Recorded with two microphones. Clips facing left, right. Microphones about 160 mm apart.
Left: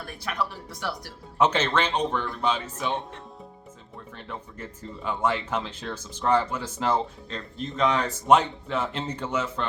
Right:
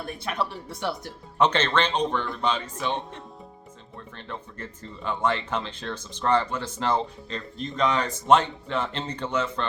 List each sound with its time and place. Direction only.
0.0 s speech: 25° right (ahead or behind)
1.4 s speech: 10° left (ahead or behind)
4.3 s speech: 5° left (ahead or behind)